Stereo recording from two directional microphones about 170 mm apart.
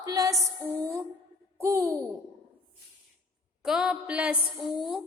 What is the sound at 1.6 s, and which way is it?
Speech, 15° right (ahead or behind).